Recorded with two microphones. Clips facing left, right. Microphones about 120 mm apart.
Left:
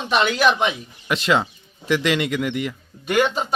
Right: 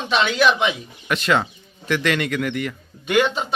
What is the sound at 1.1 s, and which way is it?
Speech, 25° left (ahead or behind).